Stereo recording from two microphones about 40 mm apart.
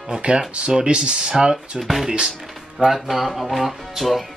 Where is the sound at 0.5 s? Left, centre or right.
Right.